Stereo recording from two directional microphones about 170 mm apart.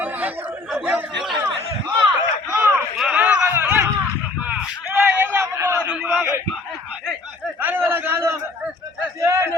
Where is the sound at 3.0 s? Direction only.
5° right (ahead or behind).